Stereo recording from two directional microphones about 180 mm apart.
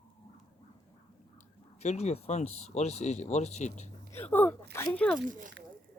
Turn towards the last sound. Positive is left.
turn(degrees=-45)  # may be behind; listen again after turning